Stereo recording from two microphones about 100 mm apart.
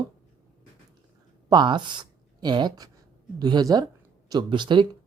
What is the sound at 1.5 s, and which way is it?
Speech, 50° right (ahead or behind).